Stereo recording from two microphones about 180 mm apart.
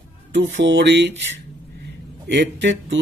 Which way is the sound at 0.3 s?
90° right.